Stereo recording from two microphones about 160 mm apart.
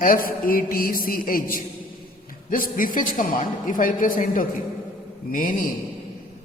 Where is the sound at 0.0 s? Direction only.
60° left (ahead or behind).